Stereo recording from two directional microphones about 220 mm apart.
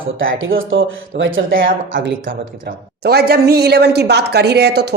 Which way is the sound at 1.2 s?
40° right (ahead or behind).